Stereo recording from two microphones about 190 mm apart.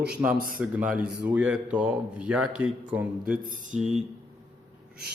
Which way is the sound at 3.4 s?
45° right (ahead or behind).